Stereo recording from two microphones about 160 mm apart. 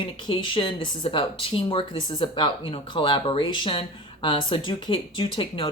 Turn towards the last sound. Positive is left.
turn(degrees=35)  # may be behind; listen again after turning